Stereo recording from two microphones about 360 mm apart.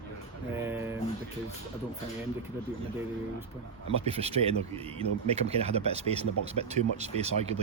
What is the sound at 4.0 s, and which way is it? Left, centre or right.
Speech, centre.